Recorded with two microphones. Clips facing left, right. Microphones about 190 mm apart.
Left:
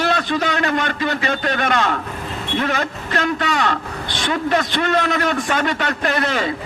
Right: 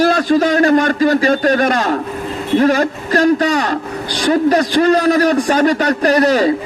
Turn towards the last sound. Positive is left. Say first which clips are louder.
# right 9 dB
turn(degrees=-40)  # may be behind; listen again after turning